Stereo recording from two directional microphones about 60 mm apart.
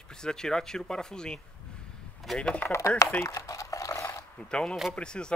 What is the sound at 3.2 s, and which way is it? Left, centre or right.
Crumpling, left.